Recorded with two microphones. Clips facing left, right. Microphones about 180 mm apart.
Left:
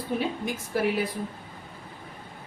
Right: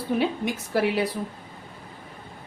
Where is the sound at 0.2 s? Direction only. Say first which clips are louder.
Right 4 dB; 75° right (ahead or behind).